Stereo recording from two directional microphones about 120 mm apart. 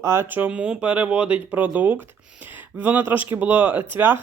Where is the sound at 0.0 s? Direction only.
20° right (ahead or behind).